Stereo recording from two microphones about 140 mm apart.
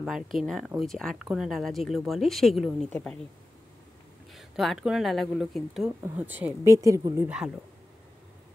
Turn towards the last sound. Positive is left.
turn(degrees=-5)  # may be behind; listen again after turning